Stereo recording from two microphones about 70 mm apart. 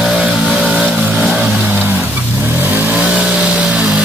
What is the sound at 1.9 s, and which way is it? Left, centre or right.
Vehicle, right.